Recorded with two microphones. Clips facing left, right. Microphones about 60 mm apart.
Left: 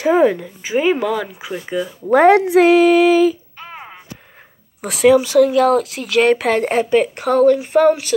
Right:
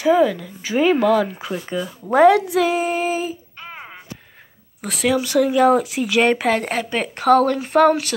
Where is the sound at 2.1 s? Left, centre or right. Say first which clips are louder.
Left 2 dB; left.